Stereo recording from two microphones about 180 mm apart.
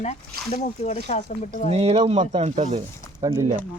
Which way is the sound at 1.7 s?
35° right (ahead or behind).